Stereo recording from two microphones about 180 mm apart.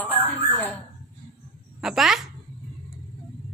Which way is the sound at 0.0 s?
10° left (ahead or behind).